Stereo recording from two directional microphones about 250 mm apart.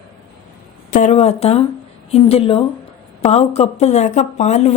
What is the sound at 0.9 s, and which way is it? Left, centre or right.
Speech, left.